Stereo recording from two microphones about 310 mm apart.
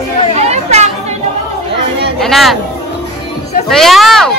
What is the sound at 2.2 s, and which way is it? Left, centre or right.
Speech, centre.